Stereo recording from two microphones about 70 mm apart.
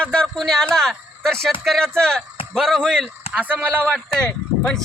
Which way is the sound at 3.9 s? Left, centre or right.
Centre.